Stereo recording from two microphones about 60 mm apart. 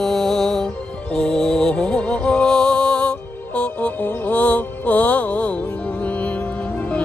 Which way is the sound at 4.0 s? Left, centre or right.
Left.